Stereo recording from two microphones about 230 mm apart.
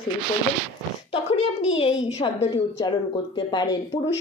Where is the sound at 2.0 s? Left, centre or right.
Left.